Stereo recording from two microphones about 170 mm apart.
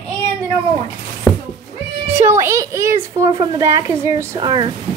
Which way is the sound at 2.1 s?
15° right (ahead or behind).